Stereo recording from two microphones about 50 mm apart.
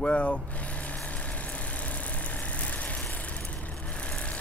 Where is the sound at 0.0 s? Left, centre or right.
Left.